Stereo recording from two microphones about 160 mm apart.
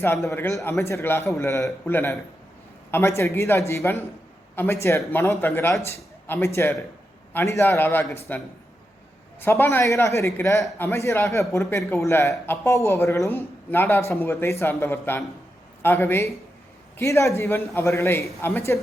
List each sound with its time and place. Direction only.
0.0 s speech: 15° left (ahead or behind)